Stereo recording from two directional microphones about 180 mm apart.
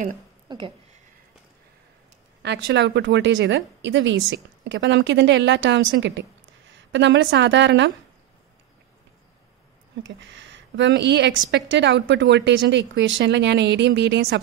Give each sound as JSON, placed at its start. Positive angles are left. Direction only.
{"t": 0.5, "sound": "speech", "side_deg": -25}
{"t": 2.4, "sound": "a woman's voice", "side_deg": -70}
{"t": 10.0, "sound": "a woman's voice", "side_deg": -90}